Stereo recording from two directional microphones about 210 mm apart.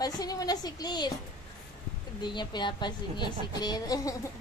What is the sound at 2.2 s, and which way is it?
A woman's voice, 20° left (ahead or behind).